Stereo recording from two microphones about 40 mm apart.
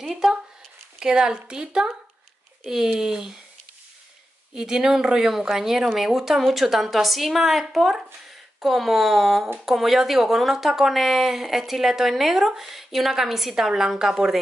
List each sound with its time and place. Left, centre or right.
0.0 s a woman's voice: centre
0.9 s a woman's voice: centre
4.6 s a woman's voice: centre